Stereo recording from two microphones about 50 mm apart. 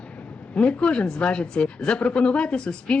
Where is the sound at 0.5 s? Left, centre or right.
Left.